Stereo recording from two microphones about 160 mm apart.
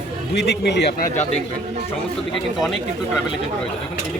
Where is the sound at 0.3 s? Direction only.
90° left; by 1.4 s 50° left (ahead or behind).